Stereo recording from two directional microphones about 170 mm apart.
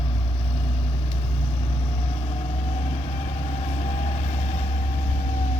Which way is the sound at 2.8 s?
40° left (ahead or behind).